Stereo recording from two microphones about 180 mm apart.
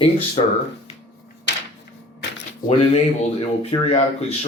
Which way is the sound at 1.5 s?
80° left.